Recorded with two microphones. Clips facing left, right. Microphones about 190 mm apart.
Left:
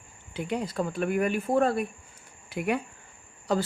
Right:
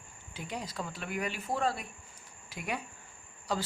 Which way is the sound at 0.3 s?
60° left (ahead or behind).